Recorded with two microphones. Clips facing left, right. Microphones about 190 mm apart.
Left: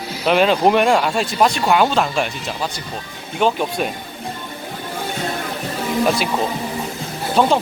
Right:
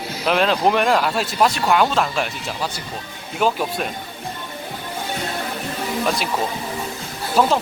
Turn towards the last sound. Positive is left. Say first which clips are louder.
# left 2 dB
turn(degrees=-5)  # may be behind; listen again after turning